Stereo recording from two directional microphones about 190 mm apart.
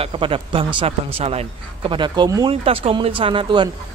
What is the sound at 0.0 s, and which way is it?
Speech, 30° right (ahead or behind).